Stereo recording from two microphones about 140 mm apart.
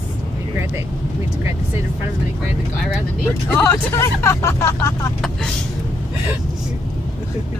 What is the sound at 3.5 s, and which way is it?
Speech, 20° left (ahead or behind).